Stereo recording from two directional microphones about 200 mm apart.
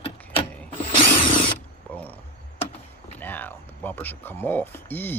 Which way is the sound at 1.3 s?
25° left (ahead or behind).